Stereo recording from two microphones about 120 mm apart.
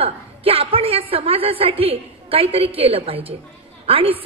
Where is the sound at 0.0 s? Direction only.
50° right (ahead or behind).